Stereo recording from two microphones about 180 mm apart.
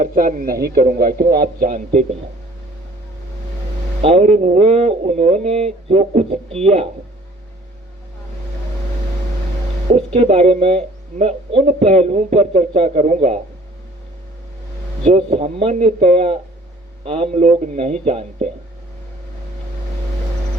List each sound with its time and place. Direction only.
0.0 s a man's voice: 50° right (ahead or behind)
4.0 s speech: 35° right (ahead or behind)
10.2 s speech: 35° right (ahead or behind)
15.0 s speech: 35° right (ahead or behind)